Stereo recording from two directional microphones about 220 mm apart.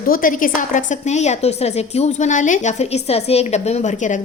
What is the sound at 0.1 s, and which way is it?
A woman's voice, 40° left (ahead or behind).